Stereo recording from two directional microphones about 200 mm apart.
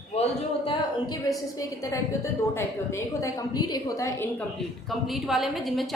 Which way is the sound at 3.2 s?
20° left (ahead or behind).